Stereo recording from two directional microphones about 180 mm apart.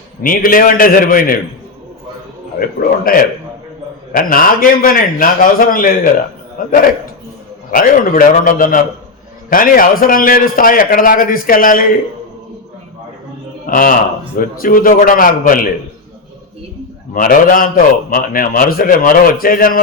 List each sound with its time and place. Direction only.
0.2 s a man's voice: 50° left (ahead or behind)
2.6 s a man's voice: 50° left (ahead or behind)
13.7 s a man's voice: 50° left (ahead or behind)
17.2 s a man's voice: 50° left (ahead or behind)